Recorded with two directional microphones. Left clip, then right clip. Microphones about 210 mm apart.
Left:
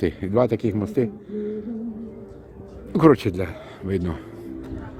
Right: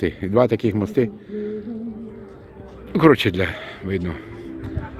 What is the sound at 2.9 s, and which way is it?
Speech, 10° left (ahead or behind).